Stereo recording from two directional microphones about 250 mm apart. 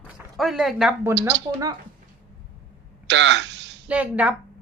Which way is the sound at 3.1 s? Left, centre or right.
Right.